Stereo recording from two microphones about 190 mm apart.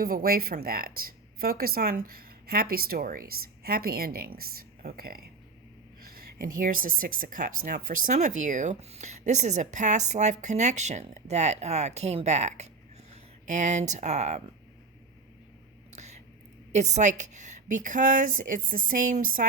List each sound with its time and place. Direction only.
0.0 s speech: 50° right (ahead or behind)
6.4 s a woman's voice: 45° right (ahead or behind)
15.9 s whispering: 35° right (ahead or behind)
16.7 s speech: 35° right (ahead or behind)